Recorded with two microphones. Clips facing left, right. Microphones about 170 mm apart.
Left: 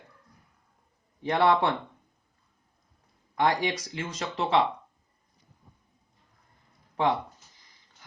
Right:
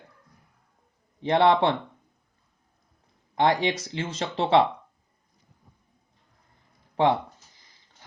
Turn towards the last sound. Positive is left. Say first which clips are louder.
# right 4 dB
turn(degrees=-30)  # may be behind; listen again after turning